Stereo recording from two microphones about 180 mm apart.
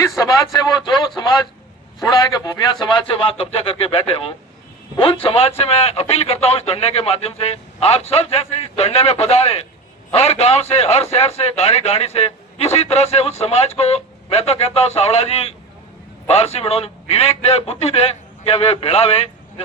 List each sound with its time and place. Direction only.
0.2 s a man's voice: 20° left (ahead or behind)